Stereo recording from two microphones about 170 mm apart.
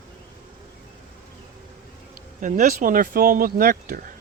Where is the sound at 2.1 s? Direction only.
50° right (ahead or behind).